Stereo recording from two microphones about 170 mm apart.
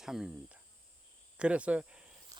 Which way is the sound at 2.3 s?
20° right (ahead or behind).